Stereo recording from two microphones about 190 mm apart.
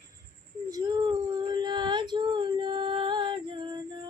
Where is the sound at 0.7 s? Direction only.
25° right (ahead or behind).